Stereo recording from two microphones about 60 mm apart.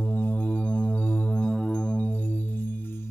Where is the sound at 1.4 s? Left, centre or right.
Centre; by 3.1 s left.